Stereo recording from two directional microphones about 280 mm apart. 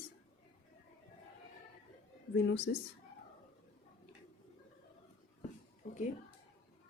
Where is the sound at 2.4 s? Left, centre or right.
Left.